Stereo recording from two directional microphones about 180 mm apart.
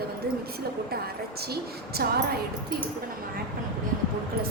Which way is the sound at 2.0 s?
60° right (ahead or behind).